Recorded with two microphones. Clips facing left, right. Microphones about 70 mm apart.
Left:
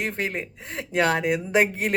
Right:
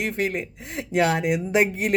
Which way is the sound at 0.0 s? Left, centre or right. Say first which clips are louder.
Right 2 dB; left.